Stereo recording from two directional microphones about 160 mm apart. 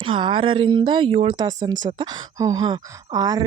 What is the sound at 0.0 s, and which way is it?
Speech, 30° right (ahead or behind).